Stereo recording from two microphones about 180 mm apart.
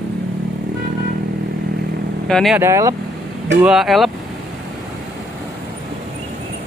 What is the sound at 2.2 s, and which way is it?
Speech, 5° left (ahead or behind).